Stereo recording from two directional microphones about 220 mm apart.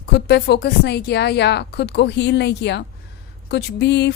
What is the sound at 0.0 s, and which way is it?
A woman's voice, 50° left (ahead or behind).